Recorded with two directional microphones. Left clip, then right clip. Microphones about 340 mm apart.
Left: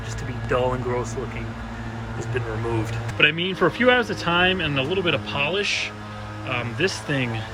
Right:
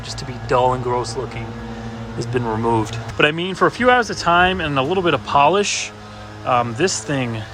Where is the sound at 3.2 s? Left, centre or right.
Centre.